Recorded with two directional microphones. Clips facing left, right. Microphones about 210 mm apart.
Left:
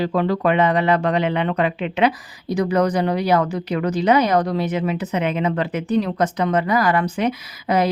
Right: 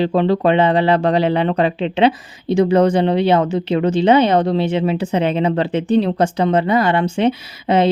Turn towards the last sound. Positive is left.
turn(degrees=-25)  # may be behind; listen again after turning